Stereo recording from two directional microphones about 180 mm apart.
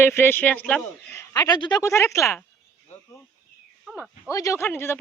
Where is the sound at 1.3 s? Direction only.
20° left (ahead or behind).